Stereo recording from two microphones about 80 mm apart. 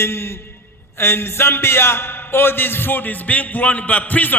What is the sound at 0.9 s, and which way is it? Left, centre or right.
A man's voice, left.